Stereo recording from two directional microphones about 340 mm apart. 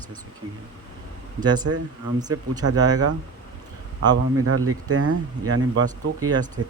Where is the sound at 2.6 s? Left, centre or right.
Right.